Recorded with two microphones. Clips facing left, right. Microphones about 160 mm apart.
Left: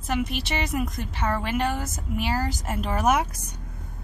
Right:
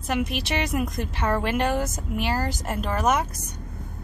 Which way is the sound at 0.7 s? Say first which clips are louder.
Right 1 dB; centre (ahead or behind).